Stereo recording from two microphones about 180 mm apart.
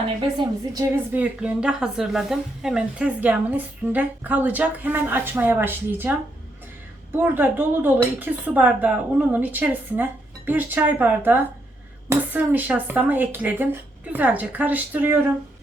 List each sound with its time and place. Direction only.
0.2 s a woman's voice: 25° right (ahead or behind)
1.1 s speech: 10° right (ahead or behind)